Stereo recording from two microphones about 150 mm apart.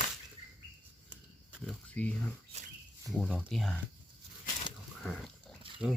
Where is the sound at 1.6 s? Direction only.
10° left (ahead or behind).